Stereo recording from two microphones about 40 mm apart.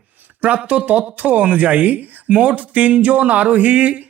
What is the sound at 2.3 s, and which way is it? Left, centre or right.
A man's voice, right.